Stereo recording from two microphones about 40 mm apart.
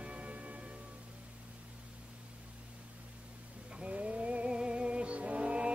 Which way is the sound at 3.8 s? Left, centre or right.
Right.